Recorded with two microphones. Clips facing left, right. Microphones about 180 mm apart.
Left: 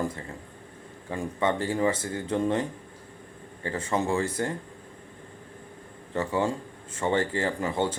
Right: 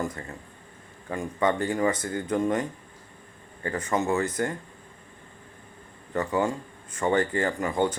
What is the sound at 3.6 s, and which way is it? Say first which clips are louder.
Speech: right 1 dB; 25° left (ahead or behind).